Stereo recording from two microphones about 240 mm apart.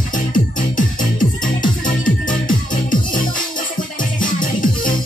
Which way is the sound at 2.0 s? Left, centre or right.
Left.